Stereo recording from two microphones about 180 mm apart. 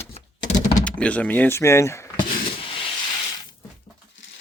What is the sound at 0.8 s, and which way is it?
Speech, 5° left (ahead or behind).